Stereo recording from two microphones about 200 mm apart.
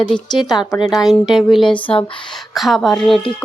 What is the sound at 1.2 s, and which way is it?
Speech, 20° left (ahead or behind).